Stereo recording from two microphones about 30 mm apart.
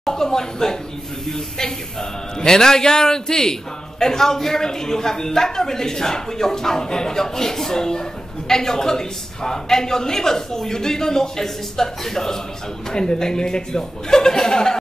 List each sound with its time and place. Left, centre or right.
0.0 s a man's voice: centre
12.9 s a man's voice: left